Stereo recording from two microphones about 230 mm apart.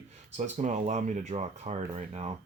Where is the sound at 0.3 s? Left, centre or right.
Right.